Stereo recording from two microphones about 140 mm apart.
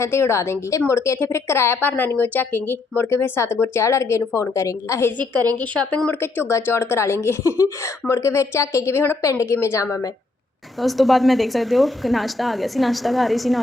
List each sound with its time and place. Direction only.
0.0 s a woman's voice: 20° left (ahead or behind)
10.8 s speech: centre (ahead or behind)